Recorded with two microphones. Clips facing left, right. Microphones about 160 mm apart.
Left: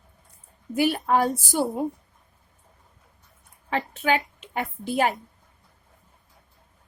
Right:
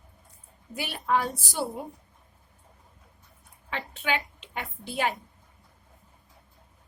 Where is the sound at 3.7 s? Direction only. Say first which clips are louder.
Left 6 dB; 40° left (ahead or behind).